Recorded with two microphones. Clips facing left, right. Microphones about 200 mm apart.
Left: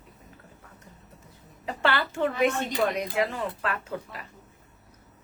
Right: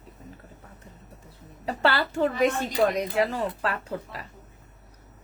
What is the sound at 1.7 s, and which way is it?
A woman's voice, 35° right (ahead or behind).